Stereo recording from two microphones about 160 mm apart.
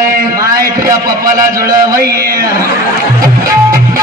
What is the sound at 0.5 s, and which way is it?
A man's voice, 20° right (ahead or behind).